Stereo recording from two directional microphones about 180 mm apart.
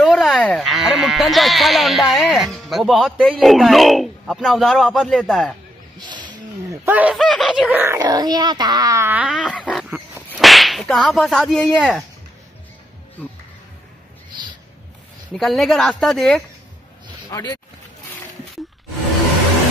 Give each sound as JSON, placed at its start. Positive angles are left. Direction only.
{"t": 0.0, "sound": "speech", "side_deg": 0}
{"t": 5.9, "sound": "speech", "side_deg": -25}
{"t": 7.2, "sound": "speech", "side_deg": 0}
{"t": 7.6, "sound": "a child's voice", "side_deg": -10}
{"t": 9.5, "sound": "a sound", "side_deg": 5}
{"t": 10.3, "sound": "whip", "side_deg": 0}
{"t": 15.3, "sound": "speech", "side_deg": 0}
{"t": 17.3, "sound": "speech", "side_deg": 20}